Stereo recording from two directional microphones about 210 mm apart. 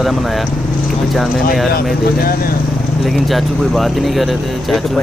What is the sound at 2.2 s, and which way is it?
Speech, 45° left (ahead or behind).